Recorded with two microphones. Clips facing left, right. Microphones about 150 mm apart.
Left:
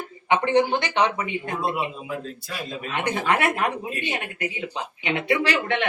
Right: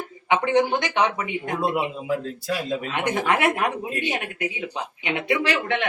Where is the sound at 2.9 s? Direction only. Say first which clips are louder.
Left 1 dB; 15° right (ahead or behind).